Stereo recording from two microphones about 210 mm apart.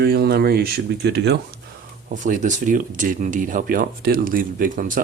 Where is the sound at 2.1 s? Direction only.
35° right (ahead or behind).